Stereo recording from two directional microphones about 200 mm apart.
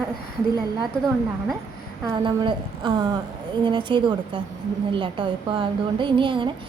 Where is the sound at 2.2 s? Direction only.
25° right (ahead or behind).